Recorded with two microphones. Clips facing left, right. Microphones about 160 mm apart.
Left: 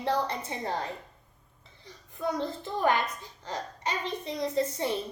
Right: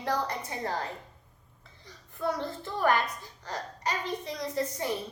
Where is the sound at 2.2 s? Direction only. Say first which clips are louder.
Left 1 dB; 20° left (ahead or behind).